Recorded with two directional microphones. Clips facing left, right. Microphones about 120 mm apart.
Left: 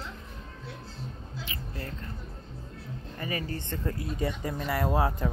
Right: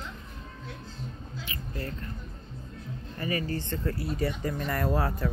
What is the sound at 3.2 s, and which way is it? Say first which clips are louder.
Speech: right 3 dB; 20° left (ahead or behind).